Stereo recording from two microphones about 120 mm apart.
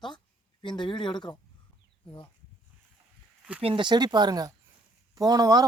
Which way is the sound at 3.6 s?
45° right (ahead or behind).